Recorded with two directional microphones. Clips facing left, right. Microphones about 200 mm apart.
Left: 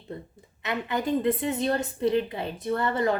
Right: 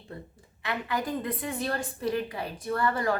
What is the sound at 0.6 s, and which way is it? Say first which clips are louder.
A woman's voice: left 3 dB; 20° left (ahead or behind).